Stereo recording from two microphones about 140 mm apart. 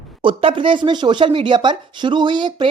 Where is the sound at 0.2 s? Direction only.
35° right (ahead or behind).